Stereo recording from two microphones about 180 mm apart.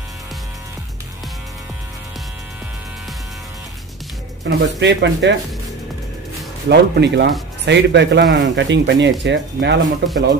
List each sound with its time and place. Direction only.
4.5 s speech: 70° right (ahead or behind)
6.7 s speech: 70° right (ahead or behind)